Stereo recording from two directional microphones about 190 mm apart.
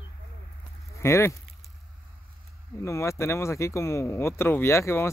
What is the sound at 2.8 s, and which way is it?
Speech, 15° left (ahead or behind).